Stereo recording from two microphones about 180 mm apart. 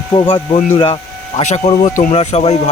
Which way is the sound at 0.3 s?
30° left (ahead or behind).